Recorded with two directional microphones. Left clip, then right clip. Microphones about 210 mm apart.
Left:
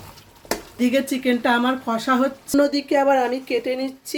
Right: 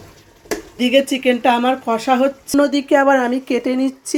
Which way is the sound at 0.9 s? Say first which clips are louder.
Right 7 dB; 5° right (ahead or behind).